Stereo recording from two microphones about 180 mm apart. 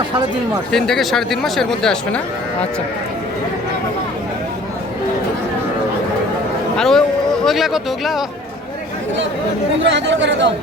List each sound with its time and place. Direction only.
0.7 s speech: centre (ahead or behind)
6.7 s speech: centre (ahead or behind)
9.9 s speech: 90° right